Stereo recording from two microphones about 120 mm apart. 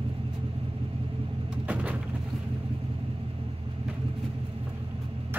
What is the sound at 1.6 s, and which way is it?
Vehicle, 10° right (ahead or behind).